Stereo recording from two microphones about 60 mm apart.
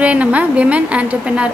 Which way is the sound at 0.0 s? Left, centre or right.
Right.